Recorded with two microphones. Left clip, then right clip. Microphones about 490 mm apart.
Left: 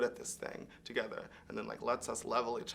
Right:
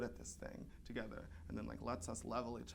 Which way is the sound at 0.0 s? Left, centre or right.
Right.